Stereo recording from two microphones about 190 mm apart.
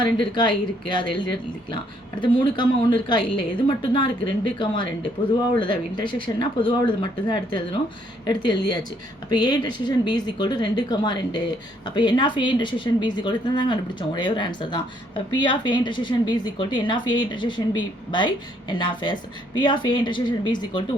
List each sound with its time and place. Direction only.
0.2 s speech: 25° left (ahead or behind)
2.2 s speech: 25° left (ahead or behind)